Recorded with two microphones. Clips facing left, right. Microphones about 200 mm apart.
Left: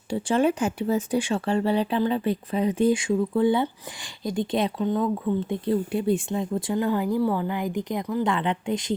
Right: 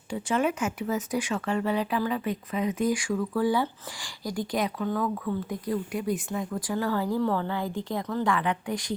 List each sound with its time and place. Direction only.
0.1 s speech: 30° left (ahead or behind)